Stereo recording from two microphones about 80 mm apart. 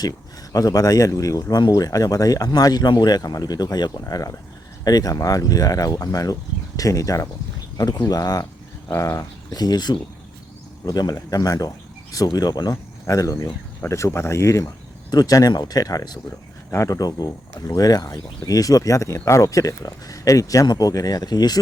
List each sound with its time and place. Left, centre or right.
0.5 s speech: left
4.0 s speech: left
9.0 s speech: left
9.5 s speech: left
13.1 s speech: left
15.1 s speech: left
16.7 s speech: left